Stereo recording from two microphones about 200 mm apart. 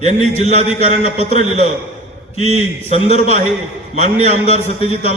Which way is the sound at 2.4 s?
35° right (ahead or behind).